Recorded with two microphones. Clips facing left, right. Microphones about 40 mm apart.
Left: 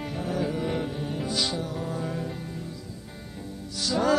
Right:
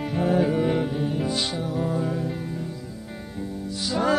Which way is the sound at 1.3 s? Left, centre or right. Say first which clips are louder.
Right 2 dB; right.